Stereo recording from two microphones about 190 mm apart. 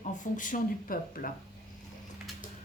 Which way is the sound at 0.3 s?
45° left (ahead or behind).